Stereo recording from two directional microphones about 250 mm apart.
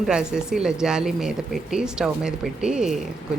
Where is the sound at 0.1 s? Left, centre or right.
Centre.